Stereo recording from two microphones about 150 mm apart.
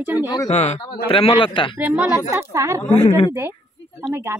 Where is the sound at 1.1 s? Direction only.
35° left (ahead or behind).